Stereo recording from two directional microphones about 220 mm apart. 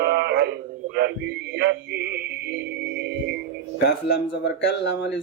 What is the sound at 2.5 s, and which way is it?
Music, 50° right (ahead or behind).